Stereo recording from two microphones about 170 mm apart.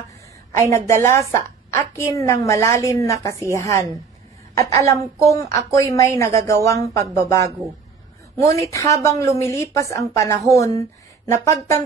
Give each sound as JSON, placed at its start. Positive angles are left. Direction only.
{"t": 0.6, "sound": "a woman's voice", "side_deg": 15}